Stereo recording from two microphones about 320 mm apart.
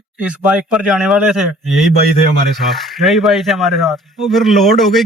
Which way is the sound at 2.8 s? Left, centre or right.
Centre.